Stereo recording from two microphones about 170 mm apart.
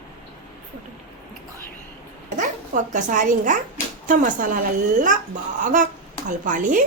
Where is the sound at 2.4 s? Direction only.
45° right (ahead or behind).